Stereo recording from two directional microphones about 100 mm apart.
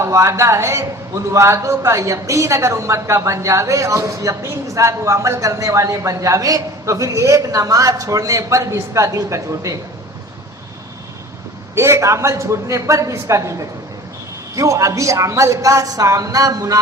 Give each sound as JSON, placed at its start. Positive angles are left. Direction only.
{"t": 0.0, "sound": "a man's voice", "side_deg": -30}
{"t": 11.7, "sound": "a man's voice", "side_deg": -25}